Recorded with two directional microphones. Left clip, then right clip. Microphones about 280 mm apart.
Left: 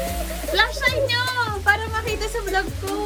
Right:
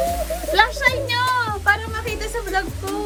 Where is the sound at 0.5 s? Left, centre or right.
Centre.